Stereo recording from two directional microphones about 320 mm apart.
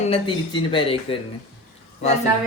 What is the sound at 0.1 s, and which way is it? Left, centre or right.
Speech, centre.